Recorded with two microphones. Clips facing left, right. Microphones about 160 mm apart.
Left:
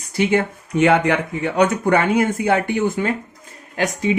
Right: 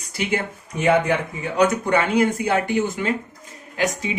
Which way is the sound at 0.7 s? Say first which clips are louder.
Left 3 dB; 85° left.